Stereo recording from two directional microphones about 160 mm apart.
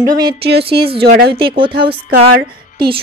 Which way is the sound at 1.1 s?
75° right (ahead or behind).